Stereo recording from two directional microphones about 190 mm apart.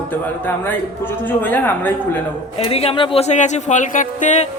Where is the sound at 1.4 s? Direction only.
10° left (ahead or behind).